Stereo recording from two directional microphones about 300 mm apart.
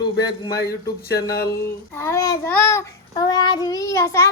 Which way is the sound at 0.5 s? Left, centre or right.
Left.